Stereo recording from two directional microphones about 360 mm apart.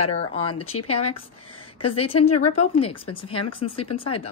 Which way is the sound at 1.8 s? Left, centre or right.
Centre.